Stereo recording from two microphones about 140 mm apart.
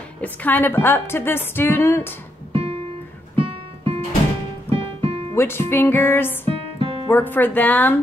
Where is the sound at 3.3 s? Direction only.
40° right (ahead or behind).